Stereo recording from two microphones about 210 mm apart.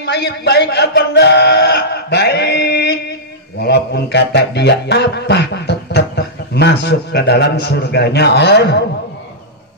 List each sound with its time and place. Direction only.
0.0 s speech: 50° left (ahead or behind)